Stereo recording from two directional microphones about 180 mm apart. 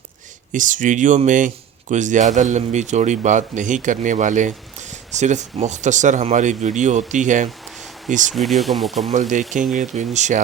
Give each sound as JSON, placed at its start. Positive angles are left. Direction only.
{"t": 0.5, "sound": "speech", "side_deg": -45}
{"t": 8.3, "sound": "speech", "side_deg": 0}
{"t": 9.1, "sound": "speech", "side_deg": -45}